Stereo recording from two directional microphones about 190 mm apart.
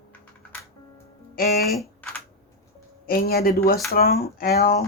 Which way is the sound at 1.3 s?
50° left (ahead or behind).